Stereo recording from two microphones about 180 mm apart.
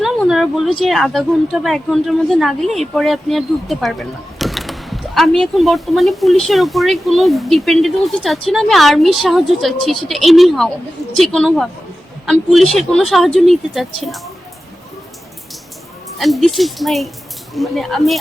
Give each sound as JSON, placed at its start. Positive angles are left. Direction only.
{"t": 0.0, "sound": "speech", "side_deg": 0}
{"t": 16.1, "sound": "speech", "side_deg": 0}